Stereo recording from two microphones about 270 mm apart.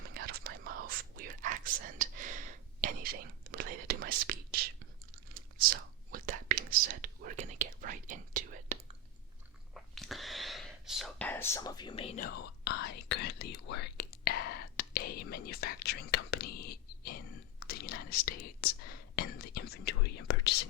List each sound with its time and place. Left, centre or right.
0.1 s whispering: right
9.7 s whispering: centre; by 20.7 s left